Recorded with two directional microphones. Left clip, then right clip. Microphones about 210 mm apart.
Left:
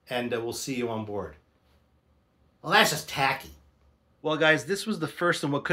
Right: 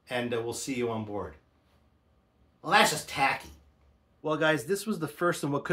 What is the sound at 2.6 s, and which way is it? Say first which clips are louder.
Speech: left 1 dB; 15° left (ahead or behind).